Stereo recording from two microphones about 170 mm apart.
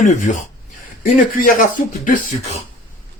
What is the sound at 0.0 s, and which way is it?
A man's voice, 50° left (ahead or behind).